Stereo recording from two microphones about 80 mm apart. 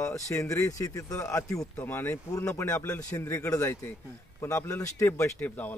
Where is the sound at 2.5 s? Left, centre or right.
Left.